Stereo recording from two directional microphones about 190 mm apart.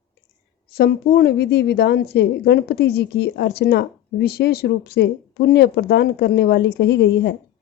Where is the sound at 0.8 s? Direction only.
55° left (ahead or behind).